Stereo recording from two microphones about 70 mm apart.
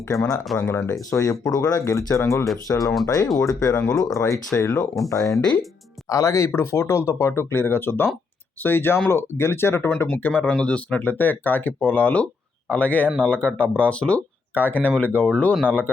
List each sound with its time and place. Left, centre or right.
0.1 s speech: left
1.1 s speech: left
2.6 s speech: left